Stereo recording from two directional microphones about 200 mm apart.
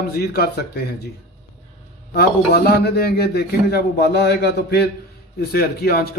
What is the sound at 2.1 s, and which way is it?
A man's voice, 50° left (ahead or behind).